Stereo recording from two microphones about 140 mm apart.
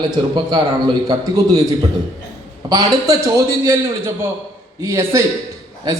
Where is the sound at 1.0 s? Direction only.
25° right (ahead or behind).